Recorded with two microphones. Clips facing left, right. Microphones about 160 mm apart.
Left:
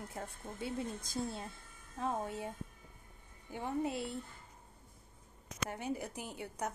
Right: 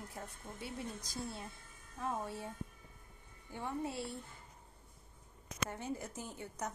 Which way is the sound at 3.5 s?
15° left (ahead or behind).